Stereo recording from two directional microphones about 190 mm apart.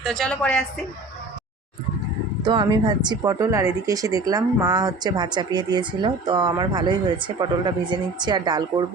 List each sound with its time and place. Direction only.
0.0 s a woman's voice: centre (ahead or behind)
2.4 s a woman's voice: 25° right (ahead or behind)